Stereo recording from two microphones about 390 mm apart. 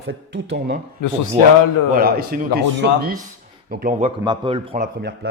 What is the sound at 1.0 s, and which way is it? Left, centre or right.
Speech, left.